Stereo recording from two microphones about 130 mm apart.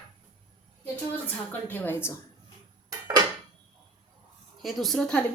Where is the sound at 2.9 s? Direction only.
35° right (ahead or behind).